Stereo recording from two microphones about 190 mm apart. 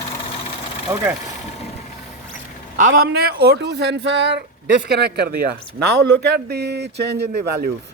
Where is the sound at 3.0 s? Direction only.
60° right (ahead or behind).